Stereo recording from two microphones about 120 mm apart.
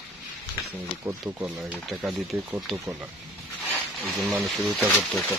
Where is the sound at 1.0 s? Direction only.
25° right (ahead or behind).